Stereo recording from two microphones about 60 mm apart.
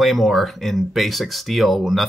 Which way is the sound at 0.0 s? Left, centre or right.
Centre.